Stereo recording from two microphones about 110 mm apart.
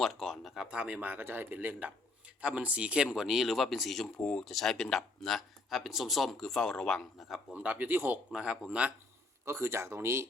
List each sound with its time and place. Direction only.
0.0 s speech: centre (ahead or behind)
7.5 s speech: 10° right (ahead or behind)
8.3 s speech: 5° right (ahead or behind)
9.4 s speech: 25° right (ahead or behind)